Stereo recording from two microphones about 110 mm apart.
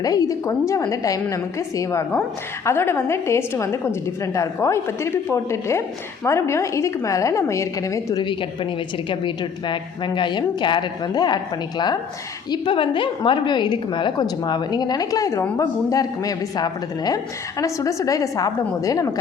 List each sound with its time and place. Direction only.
0.0 s a woman's voice: 35° left (ahead or behind)
8.2 s a woman's voice: 50° left (ahead or behind)
12.5 s a woman's voice: 50° left (ahead or behind); by 19.1 s 30° left (ahead or behind)